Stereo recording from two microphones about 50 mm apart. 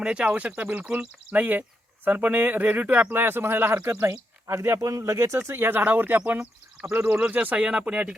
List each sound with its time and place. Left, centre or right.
0.0 s speech: right
3.2 s speech: right
3.8 s speech: right
5.5 s speech: right
6.1 s speech: right